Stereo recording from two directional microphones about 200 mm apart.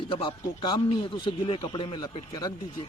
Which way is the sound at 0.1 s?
25° left (ahead or behind).